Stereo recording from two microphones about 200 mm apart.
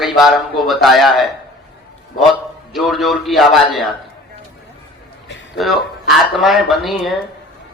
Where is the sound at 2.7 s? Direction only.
Centre (ahead or behind).